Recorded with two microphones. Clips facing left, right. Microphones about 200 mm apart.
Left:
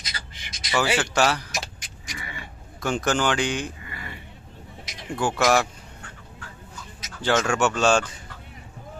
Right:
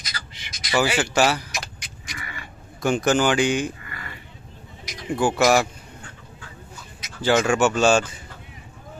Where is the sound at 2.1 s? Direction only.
25° left (ahead or behind).